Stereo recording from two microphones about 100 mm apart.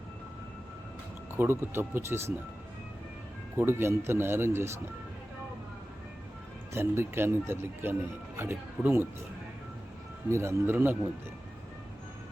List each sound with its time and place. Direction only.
1.4 s speech: 20° right (ahead or behind)
3.6 s speech: 25° right (ahead or behind)
6.7 s speech: 25° right (ahead or behind)
10.2 s speech: 25° right (ahead or behind)